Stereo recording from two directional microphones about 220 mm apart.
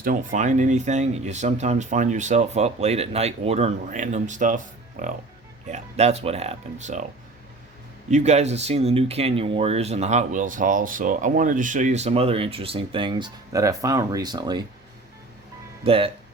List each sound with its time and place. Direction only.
0.0 s speech: 40° right (ahead or behind)
8.1 s speech: 30° right (ahead or behind)
15.8 s speech: 25° right (ahead or behind)